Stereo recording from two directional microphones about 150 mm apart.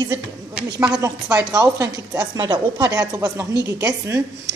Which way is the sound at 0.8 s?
25° right (ahead or behind).